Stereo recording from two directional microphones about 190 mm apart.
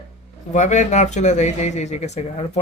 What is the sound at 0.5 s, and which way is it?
Speech, 40° left (ahead or behind).